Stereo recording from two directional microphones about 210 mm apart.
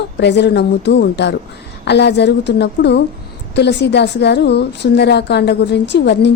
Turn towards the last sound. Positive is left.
turn(degrees=55)  # may be behind; listen again after turning